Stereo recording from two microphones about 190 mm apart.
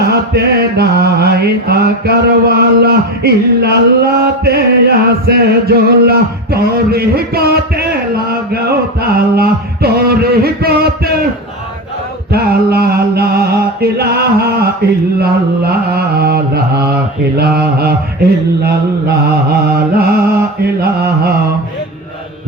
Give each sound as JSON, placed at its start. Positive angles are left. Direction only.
{"t": 0.0, "sound": "mantra", "side_deg": -55}
{"t": 12.3, "sound": "mantra", "side_deg": -55}